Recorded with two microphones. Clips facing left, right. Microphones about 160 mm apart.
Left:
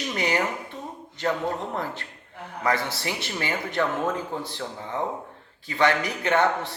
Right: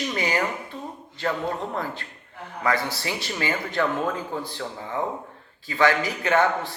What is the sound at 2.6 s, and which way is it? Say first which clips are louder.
Speech: right 1 dB; 20° left (ahead or behind).